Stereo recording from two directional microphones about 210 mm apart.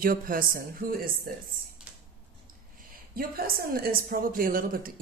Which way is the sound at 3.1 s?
45° right (ahead or behind).